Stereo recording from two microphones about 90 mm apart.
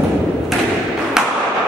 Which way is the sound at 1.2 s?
5° right (ahead or behind).